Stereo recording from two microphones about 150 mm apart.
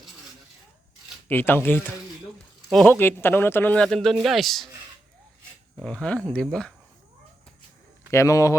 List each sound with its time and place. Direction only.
1.3 s speech: 15° left (ahead or behind)
2.8 s speech: 15° left (ahead or behind)
3.8 s a man's voice: centre (ahead or behind)
5.8 s a man's voice: 5° left (ahead or behind)
8.1 s speech: 20° left (ahead or behind)